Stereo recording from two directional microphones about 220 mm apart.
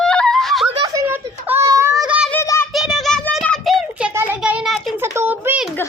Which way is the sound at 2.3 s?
10° left (ahead or behind).